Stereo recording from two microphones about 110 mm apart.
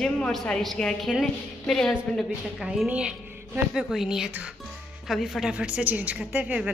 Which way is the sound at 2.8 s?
10° right (ahead or behind).